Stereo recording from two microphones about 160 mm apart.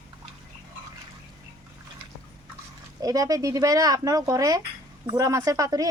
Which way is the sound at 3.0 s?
20° right (ahead or behind).